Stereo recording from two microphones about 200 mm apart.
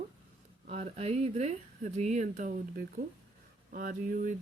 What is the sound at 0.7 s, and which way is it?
Speech, 30° right (ahead or behind).